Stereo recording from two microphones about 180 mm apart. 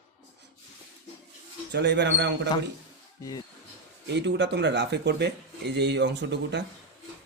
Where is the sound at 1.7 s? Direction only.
70° right (ahead or behind).